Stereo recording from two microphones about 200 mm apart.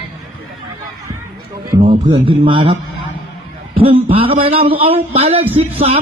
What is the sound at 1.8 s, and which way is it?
Speech, 25° right (ahead or behind).